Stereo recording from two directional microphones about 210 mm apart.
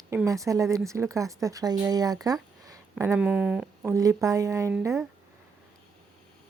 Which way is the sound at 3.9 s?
15° right (ahead or behind).